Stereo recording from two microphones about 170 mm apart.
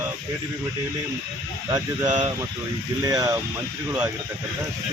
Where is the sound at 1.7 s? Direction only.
25° right (ahead or behind).